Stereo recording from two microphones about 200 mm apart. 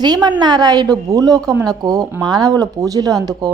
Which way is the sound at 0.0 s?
20° right (ahead or behind).